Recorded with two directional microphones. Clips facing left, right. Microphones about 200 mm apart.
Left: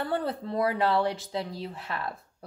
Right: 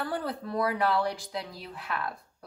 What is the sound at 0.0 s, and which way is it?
A woman's voice, 25° left (ahead or behind).